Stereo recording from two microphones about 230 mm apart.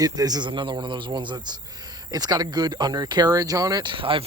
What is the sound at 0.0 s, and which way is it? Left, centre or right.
Speech, centre.